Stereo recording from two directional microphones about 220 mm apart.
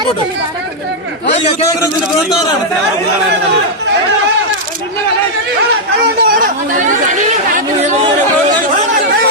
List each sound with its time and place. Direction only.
6.0 s chatter: 40° right (ahead or behind)